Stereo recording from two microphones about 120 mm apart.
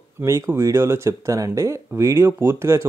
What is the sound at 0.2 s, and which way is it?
Speech, 25° right (ahead or behind).